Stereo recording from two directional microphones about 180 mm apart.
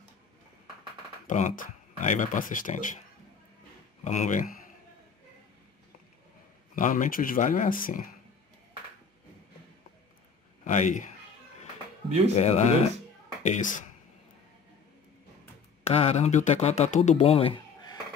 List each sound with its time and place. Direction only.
1.2 s speech: 45° left (ahead or behind)
4.0 s speech: 45° left (ahead or behind)
6.7 s speech: 45° left (ahead or behind)
10.6 s a man's voice: 45° left (ahead or behind)
12.4 s speech: 35° left (ahead or behind)
15.8 s speech: 35° left (ahead or behind)